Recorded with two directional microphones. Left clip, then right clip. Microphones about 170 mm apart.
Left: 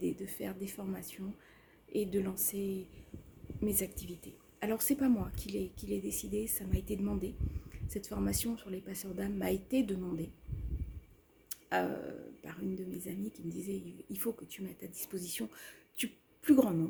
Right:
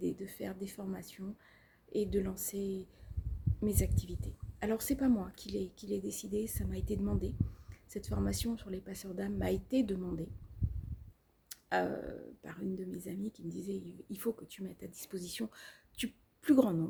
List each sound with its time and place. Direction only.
0.0 s speech: 15° right (ahead or behind)
11.4 s speech: 25° right (ahead or behind)